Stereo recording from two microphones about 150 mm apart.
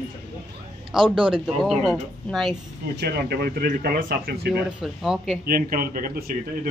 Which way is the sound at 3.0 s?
90° right.